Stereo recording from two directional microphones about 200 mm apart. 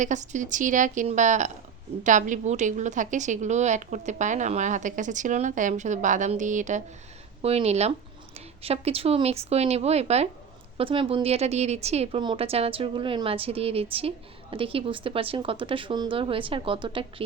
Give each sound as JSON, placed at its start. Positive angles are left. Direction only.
{"t": 0.0, "sound": "a woman's voice", "side_deg": -35}